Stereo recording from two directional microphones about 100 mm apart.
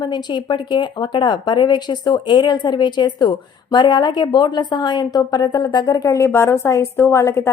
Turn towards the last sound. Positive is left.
turn(degrees=30)  # may be behind; listen again after turning